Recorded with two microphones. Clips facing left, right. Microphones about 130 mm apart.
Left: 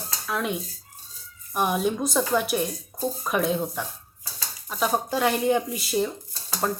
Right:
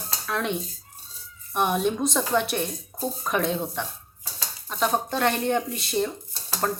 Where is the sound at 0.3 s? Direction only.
5° left (ahead or behind).